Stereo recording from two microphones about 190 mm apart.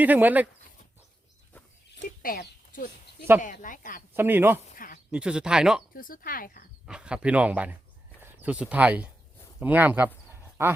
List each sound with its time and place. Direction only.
0.0 s speech: 10° right (ahead or behind)
2.2 s speech: 50° left (ahead or behind)
4.1 s speech: 10° right (ahead or behind)
4.7 s sheep: 45° left (ahead or behind)
5.1 s speech: 5° right (ahead or behind)
5.9 s speech: 50° left (ahead or behind)
6.8 s speech: 5° right (ahead or behind)
10.3 s a sound: 10° right (ahead or behind)